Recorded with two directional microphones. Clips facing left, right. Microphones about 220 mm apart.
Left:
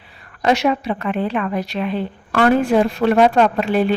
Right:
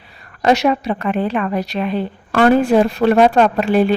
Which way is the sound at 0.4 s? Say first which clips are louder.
Right 2 dB; 40° right (ahead or behind).